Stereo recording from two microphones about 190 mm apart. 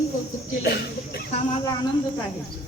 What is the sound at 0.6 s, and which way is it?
Speech, 55° left (ahead or behind).